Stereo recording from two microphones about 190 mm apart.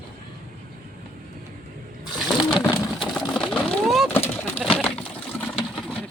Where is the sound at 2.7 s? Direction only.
Centre (ahead or behind).